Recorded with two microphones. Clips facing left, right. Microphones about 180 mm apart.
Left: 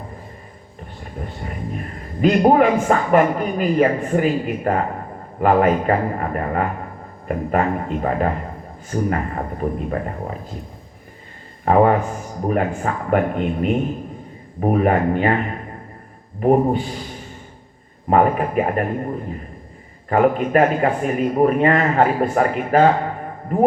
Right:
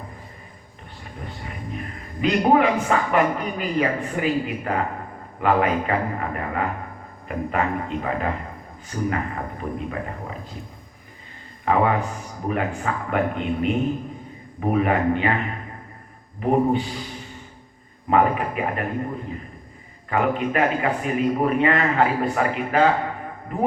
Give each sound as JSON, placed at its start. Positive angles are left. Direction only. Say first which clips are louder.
{"t": 1.4, "sound": "speech", "louder": "left 4 dB", "side_deg": 45}
{"t": 11.6, "sound": "a man's voice", "louder": "left 5 dB", "side_deg": 45}
{"t": 16.4, "sound": "speech", "louder": "left 4 dB", "side_deg": 40}
{"t": 18.1, "sound": "speech", "louder": "left 3 dB", "side_deg": 40}
{"t": 20.1, "sound": "speech", "louder": "left 5 dB", "side_deg": 40}